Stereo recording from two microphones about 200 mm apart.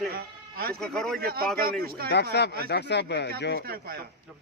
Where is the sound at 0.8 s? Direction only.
5° left (ahead or behind).